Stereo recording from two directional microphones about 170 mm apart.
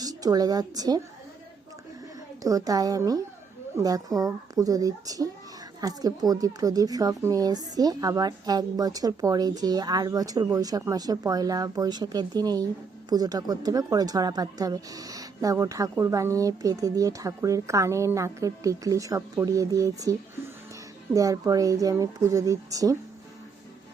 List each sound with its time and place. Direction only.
0.0 s a woman's voice: 20° right (ahead or behind)
2.4 s a woman's voice: 20° right (ahead or behind)